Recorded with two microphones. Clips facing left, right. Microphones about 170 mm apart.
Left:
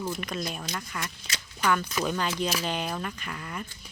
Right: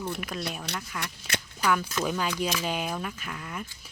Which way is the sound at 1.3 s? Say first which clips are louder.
Right 7 dB; 60° right (ahead or behind).